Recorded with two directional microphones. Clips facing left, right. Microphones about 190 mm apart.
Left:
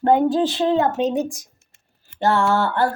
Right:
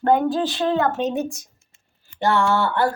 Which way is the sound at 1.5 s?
70° left (ahead or behind).